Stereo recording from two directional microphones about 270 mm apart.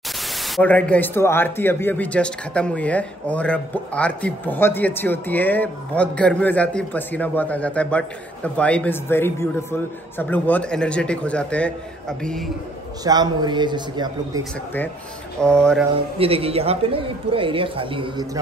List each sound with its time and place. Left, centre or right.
0.6 s a man's voice: centre
13.0 s a man's voice: centre
15.4 s a man's voice: centre
16.2 s speech: right